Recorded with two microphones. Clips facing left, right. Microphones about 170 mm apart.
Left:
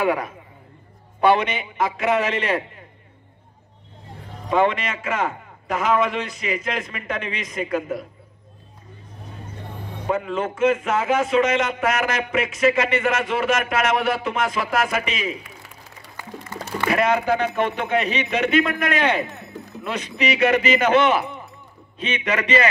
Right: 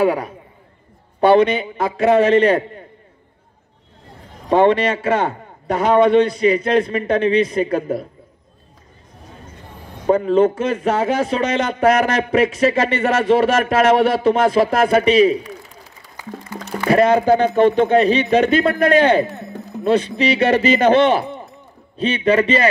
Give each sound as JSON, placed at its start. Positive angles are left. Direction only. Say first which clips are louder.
{"t": 0.0, "sound": "a man's voice", "louder": "right 4 dB", "side_deg": -35}
{"t": 4.5, "sound": "a man's voice", "louder": "right 7 dB", "side_deg": -35}
{"t": 10.0, "sound": "a man's voice", "louder": "right 10 dB", "side_deg": -35}
{"t": 16.9, "sound": "a man's voice", "louder": "right 7 dB", "side_deg": -35}